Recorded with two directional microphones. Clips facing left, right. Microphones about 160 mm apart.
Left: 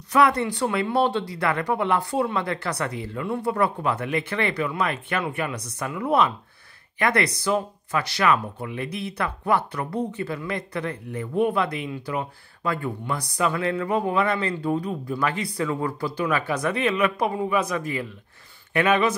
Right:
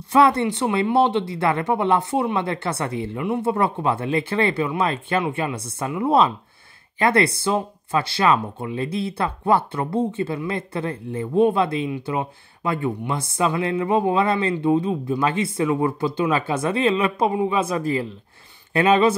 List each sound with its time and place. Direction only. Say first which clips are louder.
0.1 s speech: right 3 dB; 25° right (ahead or behind)